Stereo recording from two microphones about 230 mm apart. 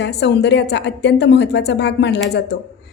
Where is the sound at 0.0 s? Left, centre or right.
Left.